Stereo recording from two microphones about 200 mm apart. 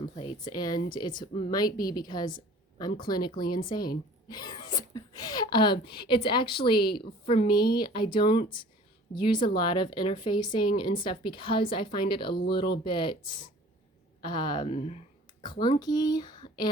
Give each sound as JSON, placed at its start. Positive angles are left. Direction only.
{"t": 0.2, "sound": "speech", "side_deg": 20}
{"t": 3.4, "sound": "speech", "side_deg": 45}
{"t": 3.7, "sound": "speech", "side_deg": 20}
{"t": 14.7, "sound": "speech", "side_deg": 35}
{"t": 15.4, "sound": "speech", "side_deg": 20}